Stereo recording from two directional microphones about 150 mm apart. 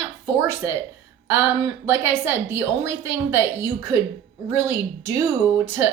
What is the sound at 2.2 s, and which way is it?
A woman's voice, 15° right (ahead or behind).